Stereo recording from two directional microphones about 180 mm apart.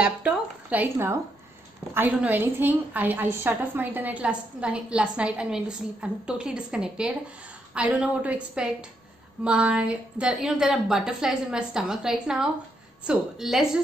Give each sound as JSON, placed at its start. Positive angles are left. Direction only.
{"t": 0.0, "sound": "a woman's voice", "side_deg": -5}